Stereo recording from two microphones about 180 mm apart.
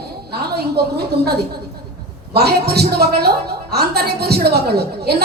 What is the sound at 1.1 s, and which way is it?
Speech, 65° right (ahead or behind).